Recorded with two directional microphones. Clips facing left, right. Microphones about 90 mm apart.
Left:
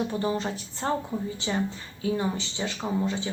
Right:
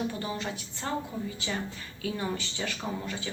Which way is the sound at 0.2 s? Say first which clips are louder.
Left 6 dB; 30° left (ahead or behind).